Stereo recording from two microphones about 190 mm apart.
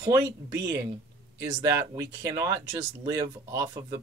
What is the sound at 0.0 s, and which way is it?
Speech, 20° right (ahead or behind).